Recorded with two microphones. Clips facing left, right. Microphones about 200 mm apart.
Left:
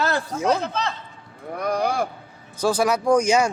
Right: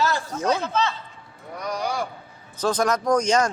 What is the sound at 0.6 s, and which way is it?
Speech, 35° left (ahead or behind).